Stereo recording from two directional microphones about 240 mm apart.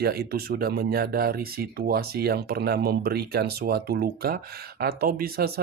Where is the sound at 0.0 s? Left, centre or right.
Right.